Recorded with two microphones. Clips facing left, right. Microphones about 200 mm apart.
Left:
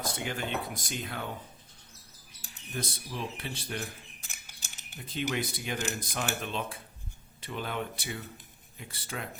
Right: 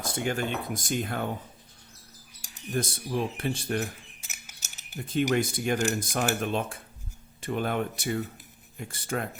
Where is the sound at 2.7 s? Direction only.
50° right (ahead or behind).